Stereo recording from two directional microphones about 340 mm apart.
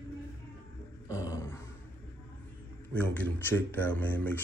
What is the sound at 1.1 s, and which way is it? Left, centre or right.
Grunt, centre.